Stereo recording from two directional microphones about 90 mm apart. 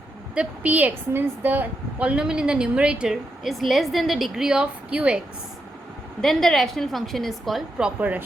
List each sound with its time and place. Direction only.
0.3 s a woman's voice: 15° right (ahead or behind)
6.2 s a woman's voice: 5° left (ahead or behind)
7.9 s a woman's voice: 15° right (ahead or behind)